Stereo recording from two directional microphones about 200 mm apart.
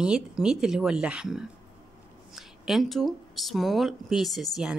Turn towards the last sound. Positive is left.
turn(degrees=0)  # may be behind; listen again after turning